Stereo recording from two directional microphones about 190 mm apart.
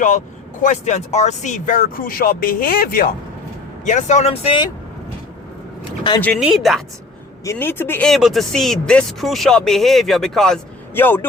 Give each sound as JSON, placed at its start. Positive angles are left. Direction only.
{"t": 0.6, "sound": "speech", "side_deg": 40}
{"t": 3.8, "sound": "speech", "side_deg": 40}
{"t": 6.4, "sound": "speech", "side_deg": 0}
{"t": 7.4, "sound": "speech", "side_deg": 15}